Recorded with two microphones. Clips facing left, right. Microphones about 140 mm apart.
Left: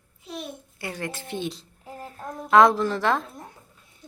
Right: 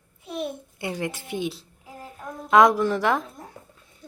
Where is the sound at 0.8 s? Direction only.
20° right (ahead or behind).